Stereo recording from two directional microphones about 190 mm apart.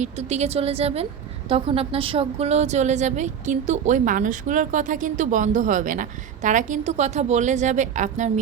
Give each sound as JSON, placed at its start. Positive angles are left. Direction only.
{"t": 0.0, "sound": "a woman's voice", "side_deg": -35}